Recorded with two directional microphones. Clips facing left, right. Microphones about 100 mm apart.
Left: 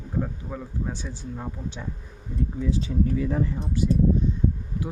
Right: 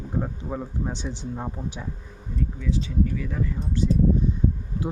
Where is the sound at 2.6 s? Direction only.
35° left (ahead or behind).